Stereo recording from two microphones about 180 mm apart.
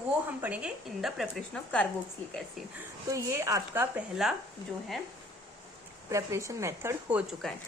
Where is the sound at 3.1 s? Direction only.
15° right (ahead or behind).